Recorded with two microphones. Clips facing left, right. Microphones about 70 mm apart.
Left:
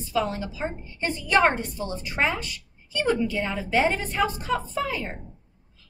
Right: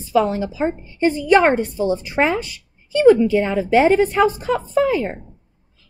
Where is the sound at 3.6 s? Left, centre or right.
Right.